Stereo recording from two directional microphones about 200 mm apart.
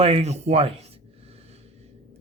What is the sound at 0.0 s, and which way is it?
Speech, 30° right (ahead or behind).